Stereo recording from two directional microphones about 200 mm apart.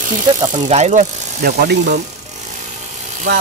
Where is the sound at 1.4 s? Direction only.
55° right (ahead or behind).